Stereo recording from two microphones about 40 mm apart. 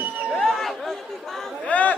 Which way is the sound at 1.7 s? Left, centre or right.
Left.